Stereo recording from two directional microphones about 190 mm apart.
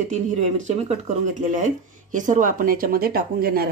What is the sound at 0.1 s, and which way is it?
Speech, 40° right (ahead or behind).